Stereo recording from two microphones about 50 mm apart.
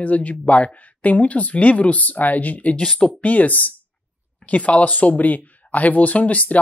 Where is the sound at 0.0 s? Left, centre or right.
Left.